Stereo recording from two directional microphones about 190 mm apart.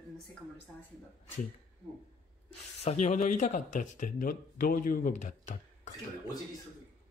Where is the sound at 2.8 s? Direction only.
35° left (ahead or behind).